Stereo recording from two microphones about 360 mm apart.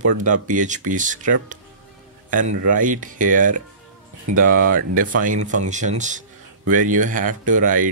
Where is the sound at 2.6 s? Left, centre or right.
Right.